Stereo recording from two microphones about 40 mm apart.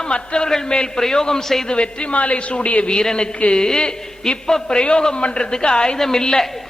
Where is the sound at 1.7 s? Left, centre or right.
Left; by 6.7 s centre.